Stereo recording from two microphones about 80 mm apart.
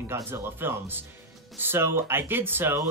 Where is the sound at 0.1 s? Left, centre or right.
Right.